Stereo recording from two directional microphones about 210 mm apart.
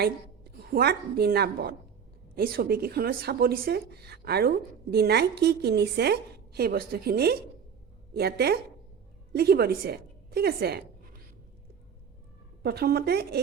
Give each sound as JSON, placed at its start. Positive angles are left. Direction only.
{"t": 0.0, "sound": "a woman's voice", "side_deg": -50}
{"t": 12.6, "sound": "speech", "side_deg": -50}